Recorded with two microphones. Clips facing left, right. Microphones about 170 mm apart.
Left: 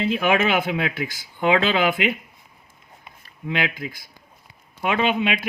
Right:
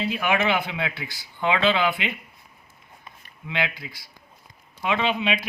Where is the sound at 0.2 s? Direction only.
50° left (ahead or behind).